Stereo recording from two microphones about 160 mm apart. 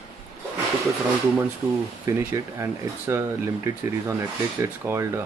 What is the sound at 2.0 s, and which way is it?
Speech, 20° right (ahead or behind).